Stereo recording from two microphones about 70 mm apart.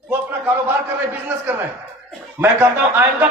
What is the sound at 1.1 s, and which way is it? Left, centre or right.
A man's voice, right.